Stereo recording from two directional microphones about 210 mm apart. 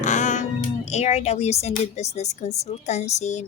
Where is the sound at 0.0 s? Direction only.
35° left (ahead or behind).